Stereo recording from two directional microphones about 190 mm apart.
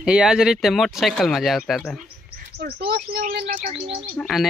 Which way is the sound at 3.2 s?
40° right (ahead or behind).